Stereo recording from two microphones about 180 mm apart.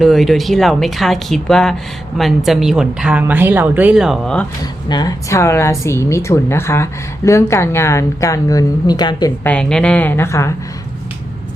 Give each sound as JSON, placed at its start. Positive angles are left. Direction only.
{"t": 0.0, "sound": "a woman's voice", "side_deg": 0}
{"t": 4.6, "sound": "speech", "side_deg": 20}
{"t": 9.4, "sound": "speech", "side_deg": 5}